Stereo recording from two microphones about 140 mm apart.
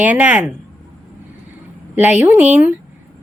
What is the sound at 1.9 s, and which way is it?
Speech, 15° right (ahead or behind).